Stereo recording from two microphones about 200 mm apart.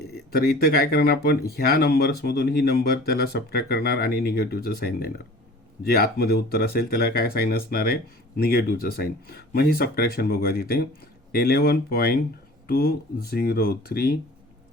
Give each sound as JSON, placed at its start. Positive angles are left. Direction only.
{"t": 0.3, "sound": "speech", "side_deg": 50}